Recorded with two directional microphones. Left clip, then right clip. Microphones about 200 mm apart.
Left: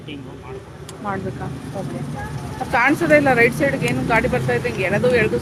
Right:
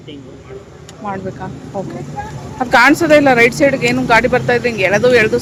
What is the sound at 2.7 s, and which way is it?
Speech, 30° right (ahead or behind).